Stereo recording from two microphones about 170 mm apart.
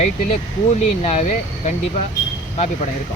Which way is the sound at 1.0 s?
45° left (ahead or behind).